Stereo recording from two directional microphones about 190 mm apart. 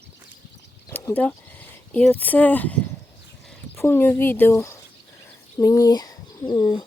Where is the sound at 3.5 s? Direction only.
10° left (ahead or behind).